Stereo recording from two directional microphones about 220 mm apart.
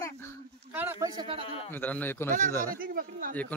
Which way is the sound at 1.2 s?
25° right (ahead or behind).